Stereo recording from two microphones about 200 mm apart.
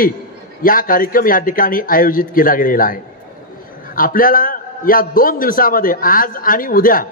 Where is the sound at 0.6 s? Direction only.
45° left (ahead or behind).